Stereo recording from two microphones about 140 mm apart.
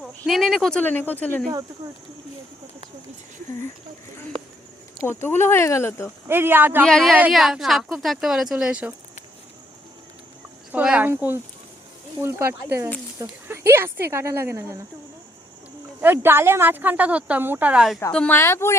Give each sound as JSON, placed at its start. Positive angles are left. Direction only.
{"t": 0.3, "sound": "speech", "side_deg": 0}
{"t": 1.8, "sound": "speech", "side_deg": -25}
{"t": 5.0, "sound": "speech", "side_deg": 15}
{"t": 6.2, "sound": "a woman's voice", "side_deg": -15}
{"t": 6.8, "sound": "speech", "side_deg": 5}
{"t": 7.1, "sound": "speech", "side_deg": -5}
{"t": 10.7, "sound": "a woman's voice", "side_deg": -10}
{"t": 16.0, "sound": "a woman's voice", "side_deg": -15}
{"t": 18.1, "sound": "speech", "side_deg": 10}